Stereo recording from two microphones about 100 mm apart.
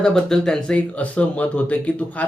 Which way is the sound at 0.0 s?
5° left (ahead or behind).